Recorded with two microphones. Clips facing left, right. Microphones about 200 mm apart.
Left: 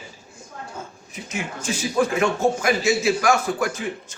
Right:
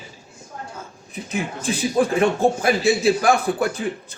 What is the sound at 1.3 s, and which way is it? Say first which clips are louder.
Speech: right 3 dB; 35° right (ahead or behind).